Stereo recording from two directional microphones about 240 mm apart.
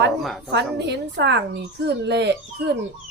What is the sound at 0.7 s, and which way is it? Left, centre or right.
Speech, right.